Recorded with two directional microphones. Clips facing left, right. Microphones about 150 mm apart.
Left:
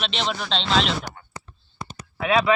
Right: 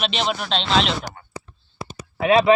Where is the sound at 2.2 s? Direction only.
25° right (ahead or behind).